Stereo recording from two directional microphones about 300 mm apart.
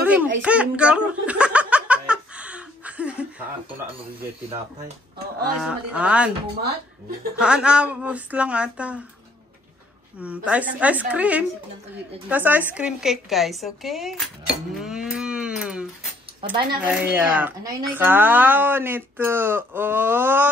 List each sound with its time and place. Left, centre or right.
0.0 s a sound: centre
0.4 s giggle: centre
5.6 s a woman's voice: centre
7.3 s a woman's voice: centre
10.2 s a woman's voice: centre
14.8 s a sound: centre
16.4 s speech: centre